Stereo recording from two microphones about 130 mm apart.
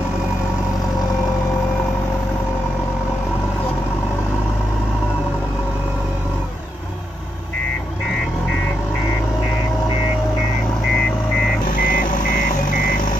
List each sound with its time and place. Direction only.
11.6 s vehicle: 90° left